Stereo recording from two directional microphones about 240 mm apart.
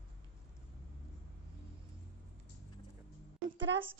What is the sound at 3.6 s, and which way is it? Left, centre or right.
Speech, right.